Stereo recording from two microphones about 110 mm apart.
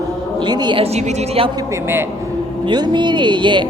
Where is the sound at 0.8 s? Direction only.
80° right.